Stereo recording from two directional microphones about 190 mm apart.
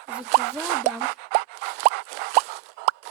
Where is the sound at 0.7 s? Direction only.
55° right (ahead or behind).